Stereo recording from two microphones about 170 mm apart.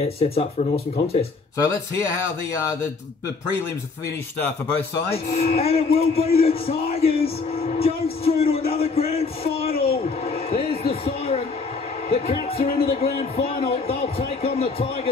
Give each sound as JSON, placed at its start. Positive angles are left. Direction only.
{"t": 0.0, "sound": "speech", "side_deg": 35}
{"t": 4.4, "sound": "a man's voice", "side_deg": 10}
{"t": 5.4, "sound": "speech", "side_deg": 40}
{"t": 6.9, "sound": "music", "side_deg": 35}
{"t": 9.8, "sound": "a sound", "side_deg": 35}
{"t": 12.1, "sound": "music", "side_deg": 35}
{"t": 12.7, "sound": "a sound", "side_deg": 35}
{"t": 13.1, "sound": "a man's voice", "side_deg": 35}